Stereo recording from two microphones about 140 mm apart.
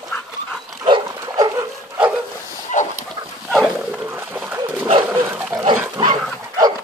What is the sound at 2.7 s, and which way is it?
Chicken, 65° left (ahead or behind).